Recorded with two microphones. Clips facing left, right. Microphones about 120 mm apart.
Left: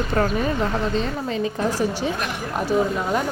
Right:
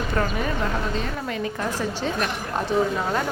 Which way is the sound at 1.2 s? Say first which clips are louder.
Left 4 dB; 25° left (ahead or behind).